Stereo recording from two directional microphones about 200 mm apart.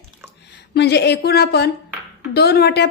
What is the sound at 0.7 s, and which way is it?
Speech, 55° left (ahead or behind).